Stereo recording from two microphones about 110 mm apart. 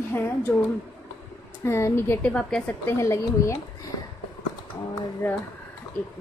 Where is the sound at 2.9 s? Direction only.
25° left (ahead or behind).